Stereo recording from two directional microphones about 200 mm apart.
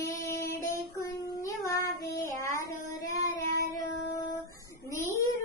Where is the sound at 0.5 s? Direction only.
15° left (ahead or behind).